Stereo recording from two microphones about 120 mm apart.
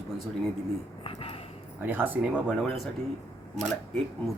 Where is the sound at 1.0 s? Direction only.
50° left (ahead or behind).